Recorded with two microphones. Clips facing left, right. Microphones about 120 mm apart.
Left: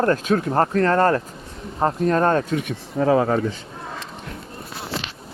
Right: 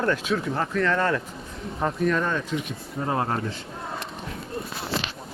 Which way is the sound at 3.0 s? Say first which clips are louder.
Left 10 dB; 90° left.